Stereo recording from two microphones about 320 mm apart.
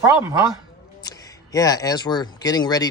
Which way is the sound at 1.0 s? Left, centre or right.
Centre.